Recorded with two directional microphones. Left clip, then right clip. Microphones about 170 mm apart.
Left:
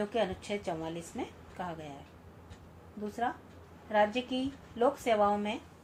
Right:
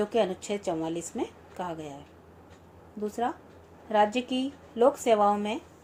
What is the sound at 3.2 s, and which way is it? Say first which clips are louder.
A woman's voice: right 3 dB; 55° right (ahead or behind).